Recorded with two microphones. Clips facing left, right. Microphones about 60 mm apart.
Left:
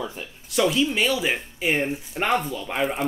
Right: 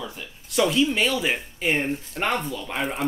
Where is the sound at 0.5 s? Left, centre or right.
Centre.